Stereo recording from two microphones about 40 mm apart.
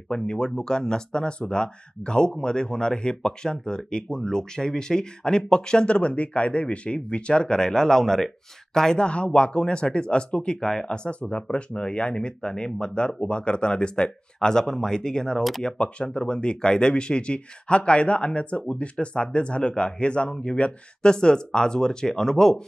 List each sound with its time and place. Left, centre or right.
0.1 s speech: left
9.0 s speech: left
11.1 s speech: left
15.6 s speech: left